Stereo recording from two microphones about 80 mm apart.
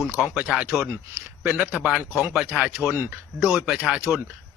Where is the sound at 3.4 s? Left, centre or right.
Centre.